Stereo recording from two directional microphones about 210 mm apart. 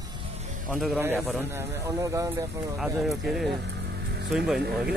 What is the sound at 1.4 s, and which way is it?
Speech, 10° right (ahead or behind).